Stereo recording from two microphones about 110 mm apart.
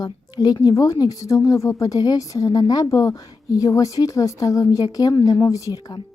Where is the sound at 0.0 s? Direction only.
35° left (ahead or behind).